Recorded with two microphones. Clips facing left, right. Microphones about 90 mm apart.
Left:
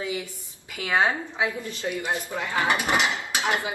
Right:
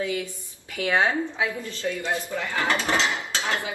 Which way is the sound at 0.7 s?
10° left (ahead or behind).